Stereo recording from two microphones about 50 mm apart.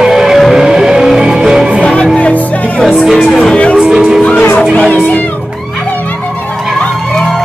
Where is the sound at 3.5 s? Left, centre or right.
Left.